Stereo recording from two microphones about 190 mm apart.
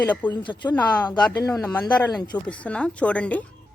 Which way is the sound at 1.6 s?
5° left (ahead or behind).